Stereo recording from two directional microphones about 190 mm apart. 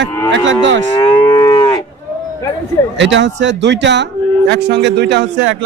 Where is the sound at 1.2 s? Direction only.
15° left (ahead or behind).